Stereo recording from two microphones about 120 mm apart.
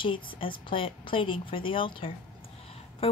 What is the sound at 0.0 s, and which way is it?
Speech, 45° left (ahead or behind).